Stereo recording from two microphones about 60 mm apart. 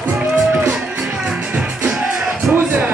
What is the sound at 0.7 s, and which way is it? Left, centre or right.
Music, centre.